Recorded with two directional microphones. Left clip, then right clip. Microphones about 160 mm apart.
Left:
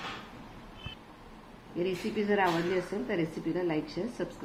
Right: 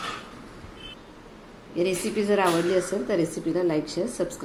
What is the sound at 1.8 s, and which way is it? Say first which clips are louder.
Speech: right 7 dB; 20° right (ahead or behind).